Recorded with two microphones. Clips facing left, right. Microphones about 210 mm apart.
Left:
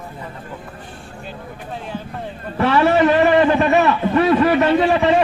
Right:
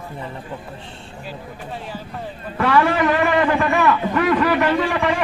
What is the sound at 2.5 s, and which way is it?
A man's voice, 25° left (ahead or behind).